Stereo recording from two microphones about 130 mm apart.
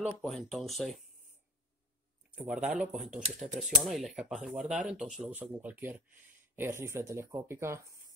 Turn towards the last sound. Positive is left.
turn(degrees=-20)  # may be behind; listen again after turning